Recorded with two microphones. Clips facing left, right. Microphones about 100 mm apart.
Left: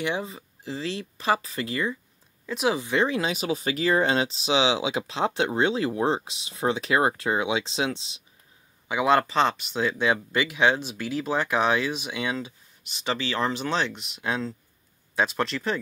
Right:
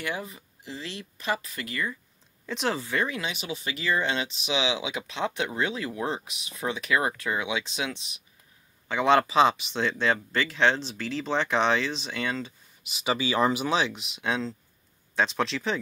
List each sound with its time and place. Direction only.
0.0 s speech: 25° left (ahead or behind)
2.4 s speech: 5° left (ahead or behind)
2.8 s speech: 20° left (ahead or behind)
3.1 s speech: 35° left (ahead or behind)
8.8 s speech: 5° left (ahead or behind)
12.8 s speech: 5° right (ahead or behind)